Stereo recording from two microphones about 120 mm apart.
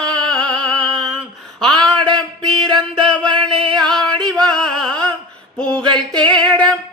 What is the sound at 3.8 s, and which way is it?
Music, 5° left (ahead or behind).